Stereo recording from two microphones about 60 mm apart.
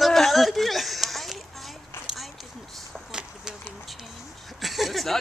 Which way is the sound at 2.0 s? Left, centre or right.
Centre.